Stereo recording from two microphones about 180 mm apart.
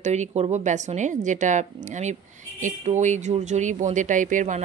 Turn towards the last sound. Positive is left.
turn(degrees=-45)  # may be behind; listen again after turning